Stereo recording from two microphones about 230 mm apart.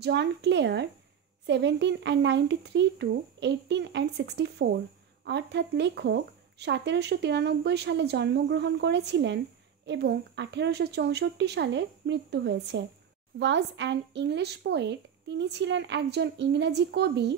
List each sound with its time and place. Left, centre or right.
0.0 s speech: right